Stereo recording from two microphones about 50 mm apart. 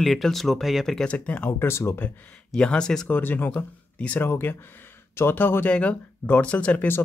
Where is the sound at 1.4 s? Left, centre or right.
Left.